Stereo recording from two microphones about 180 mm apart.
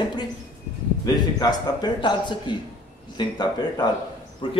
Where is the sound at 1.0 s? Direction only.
25° left (ahead or behind).